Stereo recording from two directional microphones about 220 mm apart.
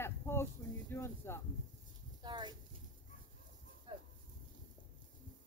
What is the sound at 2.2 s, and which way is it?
Speech, 20° right (ahead or behind).